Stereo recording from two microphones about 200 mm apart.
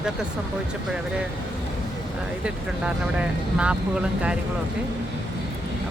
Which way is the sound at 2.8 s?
5° right (ahead or behind).